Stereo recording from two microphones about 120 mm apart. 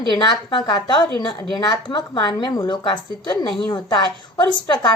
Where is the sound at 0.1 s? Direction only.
40° left (ahead or behind).